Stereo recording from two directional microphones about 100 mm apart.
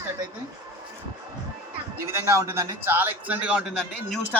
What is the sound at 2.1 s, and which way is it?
A man's voice, 30° right (ahead or behind).